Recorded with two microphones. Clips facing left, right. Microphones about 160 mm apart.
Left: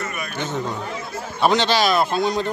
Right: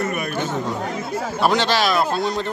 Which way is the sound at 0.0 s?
55° right (ahead or behind).